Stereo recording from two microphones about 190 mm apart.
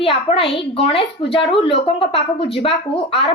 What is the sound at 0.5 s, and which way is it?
A woman's voice, 30° left (ahead or behind).